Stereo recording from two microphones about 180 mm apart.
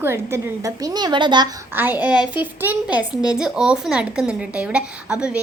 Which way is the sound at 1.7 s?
10° right (ahead or behind).